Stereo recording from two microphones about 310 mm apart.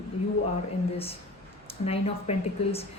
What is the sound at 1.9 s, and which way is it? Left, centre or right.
Speech, centre.